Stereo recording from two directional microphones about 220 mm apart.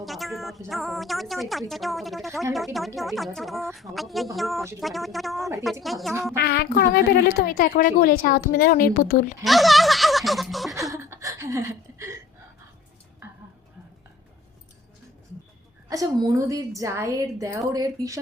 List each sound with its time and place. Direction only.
0.0 s speech: centre (ahead or behind)
6.4 s a woman's voice: 45° left (ahead or behind)
9.4 s speech: centre (ahead or behind)
10.9 s a sound: 15° right (ahead or behind)
15.9 s a woman's voice: 15° right (ahead or behind)